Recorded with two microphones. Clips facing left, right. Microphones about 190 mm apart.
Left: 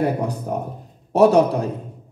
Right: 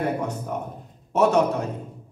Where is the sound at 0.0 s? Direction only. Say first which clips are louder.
Left 4 dB; 35° left (ahead or behind).